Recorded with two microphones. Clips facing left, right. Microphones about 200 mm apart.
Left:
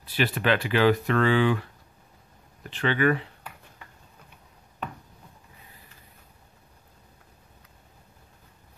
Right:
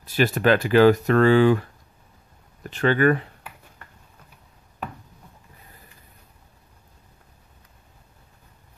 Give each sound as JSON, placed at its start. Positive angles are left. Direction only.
{"t": 0.0, "sound": "speech", "side_deg": -45}